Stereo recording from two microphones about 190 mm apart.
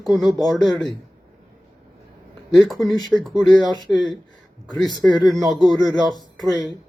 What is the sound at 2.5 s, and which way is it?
Speech, centre (ahead or behind).